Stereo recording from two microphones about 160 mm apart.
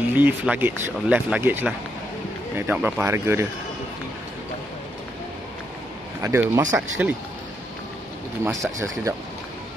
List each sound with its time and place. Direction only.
0.1 s speech: 10° right (ahead or behind)
6.2 s speech: 20° right (ahead or behind)
8.5 s speech: 20° right (ahead or behind)